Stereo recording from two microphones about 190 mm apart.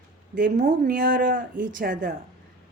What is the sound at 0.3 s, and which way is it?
Speech, 45° right (ahead or behind).